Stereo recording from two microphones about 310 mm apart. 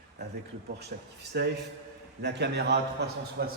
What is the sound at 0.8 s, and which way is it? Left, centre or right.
A man's voice, right.